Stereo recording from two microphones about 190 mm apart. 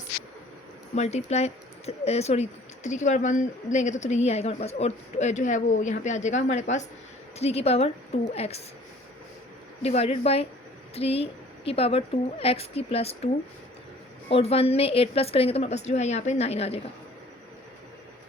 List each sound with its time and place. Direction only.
0.9 s speech: 35° left (ahead or behind)
9.8 s speech: 35° left (ahead or behind)